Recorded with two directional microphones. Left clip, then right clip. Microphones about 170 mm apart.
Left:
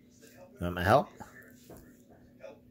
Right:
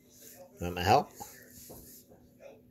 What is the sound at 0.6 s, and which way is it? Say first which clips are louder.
Speech: even; 30° left (ahead or behind).